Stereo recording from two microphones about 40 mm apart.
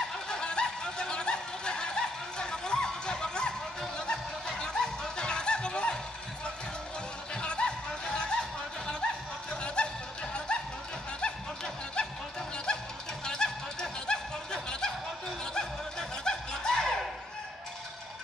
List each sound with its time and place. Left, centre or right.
0.3 s snicker: left
4.5 s music: centre
7.3 s music: left
9.5 s snicker: left
10.5 s a sound: left
11.1 s snicker: left
12.7 s music: left
13.2 s a sound: centre
15.4 s music: centre